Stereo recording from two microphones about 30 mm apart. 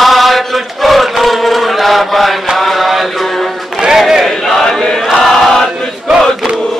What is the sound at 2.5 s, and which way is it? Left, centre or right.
Mantra, centre.